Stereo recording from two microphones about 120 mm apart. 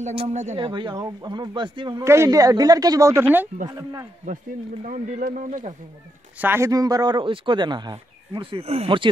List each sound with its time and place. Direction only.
0.3 s speech: 75° right (ahead or behind)
0.6 s speech: 40° right (ahead or behind)
2.0 s speech: 25° right (ahead or behind)
4.8 s speech: 90° right
6.3 s speech: 15° right (ahead or behind)
6.7 s speech: 30° right (ahead or behind)